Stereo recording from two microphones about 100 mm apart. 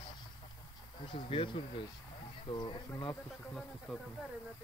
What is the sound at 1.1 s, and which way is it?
Speech, 60° left (ahead or behind).